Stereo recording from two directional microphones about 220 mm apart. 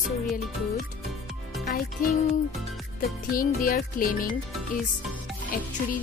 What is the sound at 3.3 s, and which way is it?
Speech, 40° left (ahead or behind).